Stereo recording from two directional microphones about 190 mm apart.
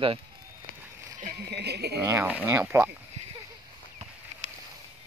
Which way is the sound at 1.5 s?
60° right (ahead or behind).